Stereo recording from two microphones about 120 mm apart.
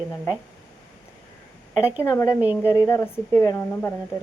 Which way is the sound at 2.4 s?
15° right (ahead or behind).